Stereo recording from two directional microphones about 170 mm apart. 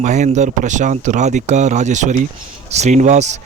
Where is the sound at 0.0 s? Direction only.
45° right (ahead or behind).